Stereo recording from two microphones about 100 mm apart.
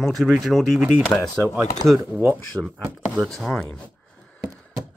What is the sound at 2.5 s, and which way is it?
Speech, 10° right (ahead or behind).